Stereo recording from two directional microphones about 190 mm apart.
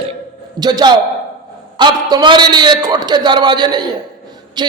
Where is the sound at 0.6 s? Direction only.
20° right (ahead or behind).